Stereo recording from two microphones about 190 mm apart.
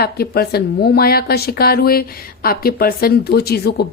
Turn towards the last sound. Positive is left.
turn(degrees=55)  # may be behind; listen again after turning